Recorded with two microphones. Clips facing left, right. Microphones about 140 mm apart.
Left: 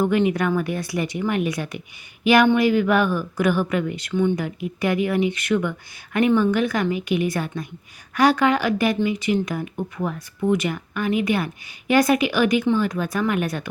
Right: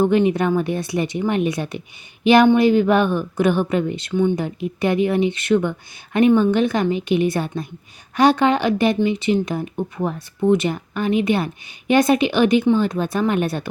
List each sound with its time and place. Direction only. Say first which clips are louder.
0.0 s speech: right 3 dB; 25° right (ahead or behind)
4.4 s speech: right 3 dB; 25° right (ahead or behind)